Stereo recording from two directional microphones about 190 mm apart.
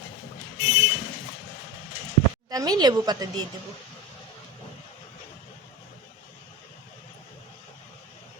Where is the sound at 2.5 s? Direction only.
20° right (ahead or behind).